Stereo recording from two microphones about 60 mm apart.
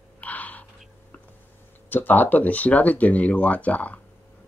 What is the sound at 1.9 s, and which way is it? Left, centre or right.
Speech, left.